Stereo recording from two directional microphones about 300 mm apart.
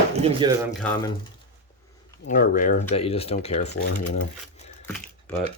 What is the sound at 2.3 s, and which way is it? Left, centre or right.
Speech, left.